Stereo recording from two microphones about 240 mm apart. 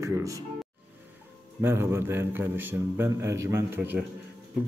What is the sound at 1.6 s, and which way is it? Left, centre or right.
A man's voice, centre.